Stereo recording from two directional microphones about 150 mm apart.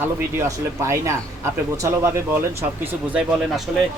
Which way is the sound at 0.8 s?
20° right (ahead or behind).